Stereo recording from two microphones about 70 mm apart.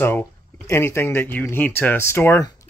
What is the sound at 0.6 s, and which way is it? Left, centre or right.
Speech, left.